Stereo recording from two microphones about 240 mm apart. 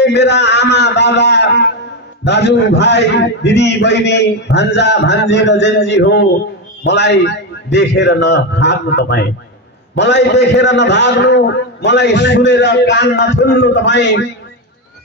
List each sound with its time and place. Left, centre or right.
0.0 s a man's voice: left